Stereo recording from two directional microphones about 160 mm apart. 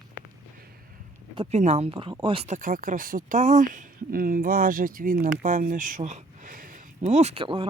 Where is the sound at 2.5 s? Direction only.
60° right (ahead or behind).